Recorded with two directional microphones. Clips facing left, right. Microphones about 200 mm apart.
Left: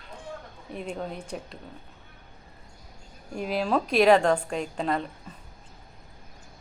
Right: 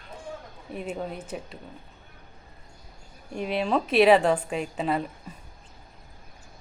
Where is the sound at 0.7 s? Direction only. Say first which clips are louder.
Right 1 dB; 5° right (ahead or behind).